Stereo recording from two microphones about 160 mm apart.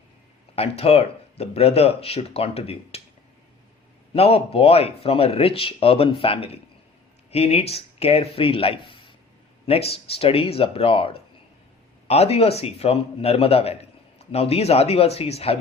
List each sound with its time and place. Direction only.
0.5 s speech: 40° left (ahead or behind)
4.1 s speech: 40° left (ahead or behind)